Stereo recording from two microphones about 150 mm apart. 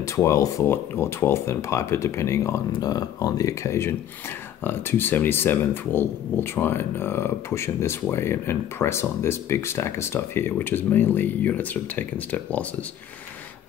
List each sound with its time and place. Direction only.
0.0 s speech: 20° left (ahead or behind)